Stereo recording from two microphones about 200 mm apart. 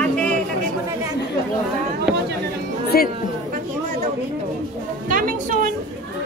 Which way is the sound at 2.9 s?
50° left (ahead or behind).